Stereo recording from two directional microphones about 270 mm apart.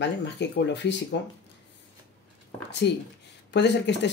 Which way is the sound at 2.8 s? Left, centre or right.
Left.